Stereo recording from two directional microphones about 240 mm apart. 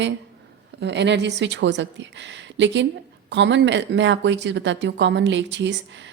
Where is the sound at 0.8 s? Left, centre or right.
Right.